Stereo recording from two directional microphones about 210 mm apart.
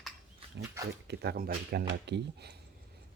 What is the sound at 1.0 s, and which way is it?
Speech, 50° right (ahead or behind).